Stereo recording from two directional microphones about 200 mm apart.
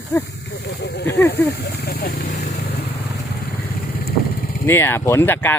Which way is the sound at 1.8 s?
50° left (ahead or behind).